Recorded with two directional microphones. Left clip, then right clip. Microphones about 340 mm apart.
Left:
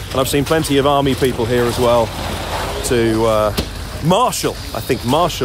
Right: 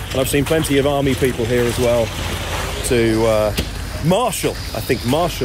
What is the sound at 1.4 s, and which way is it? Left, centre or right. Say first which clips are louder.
Speech: left 2 dB; left.